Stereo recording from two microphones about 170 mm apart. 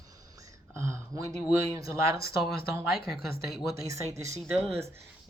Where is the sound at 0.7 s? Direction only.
15° right (ahead or behind).